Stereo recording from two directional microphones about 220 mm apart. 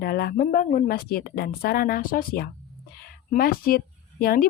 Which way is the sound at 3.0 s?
45° left (ahead or behind).